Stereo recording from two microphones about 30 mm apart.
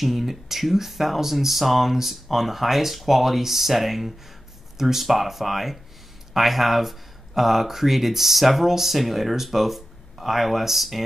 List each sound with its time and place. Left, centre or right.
0.0 s speech: centre